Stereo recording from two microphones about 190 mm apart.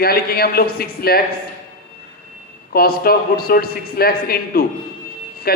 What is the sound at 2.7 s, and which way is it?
Speech, 50° left (ahead or behind).